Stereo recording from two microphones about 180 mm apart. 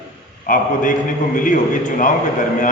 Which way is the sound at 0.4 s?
50° left (ahead or behind).